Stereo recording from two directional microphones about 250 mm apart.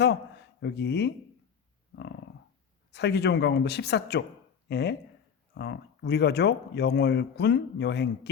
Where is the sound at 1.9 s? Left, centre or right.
Left.